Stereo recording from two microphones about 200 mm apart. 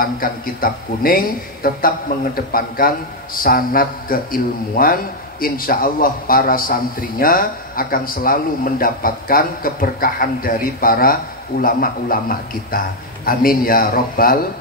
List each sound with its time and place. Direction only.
0.0 s a man's voice: 45° left (ahead or behind)